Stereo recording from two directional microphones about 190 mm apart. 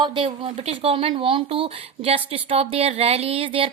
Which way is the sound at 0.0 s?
25° right (ahead or behind).